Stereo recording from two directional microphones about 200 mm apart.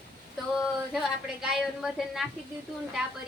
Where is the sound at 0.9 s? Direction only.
Centre (ahead or behind).